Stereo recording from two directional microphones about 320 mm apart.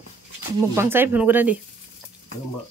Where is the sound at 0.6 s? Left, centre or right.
Centre.